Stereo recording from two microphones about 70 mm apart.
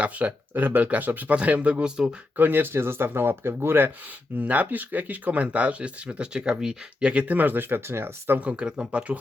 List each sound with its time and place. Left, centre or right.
0.0 s speech: right
2.3 s speech: right
8.4 s speech: centre